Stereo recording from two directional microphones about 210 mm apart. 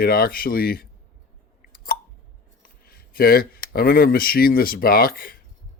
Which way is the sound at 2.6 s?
45° left (ahead or behind).